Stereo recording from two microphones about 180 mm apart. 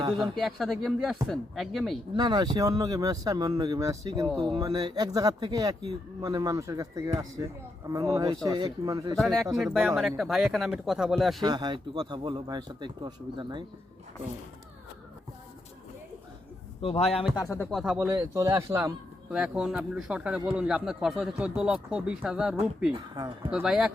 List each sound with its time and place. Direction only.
0.2 s speech: centre (ahead or behind)
2.1 s speech: 25° right (ahead or behind)
9.1 s speech: centre (ahead or behind)
11.4 s speech: 20° right (ahead or behind)
16.8 s a man's voice: 35° left (ahead or behind)
17.3 s speech: 15° left (ahead or behind)
17.7 s speech: centre (ahead or behind)
17.9 s speech: 10° right (ahead or behind)
19.3 s speech: 5° right (ahead or behind)
22.9 s speech: 25° right (ahead or behind)
23.5 s speech: 5° right (ahead or behind)